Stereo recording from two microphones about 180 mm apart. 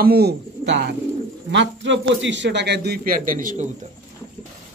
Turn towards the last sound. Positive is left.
turn(degrees=-50)  # may be behind; listen again after turning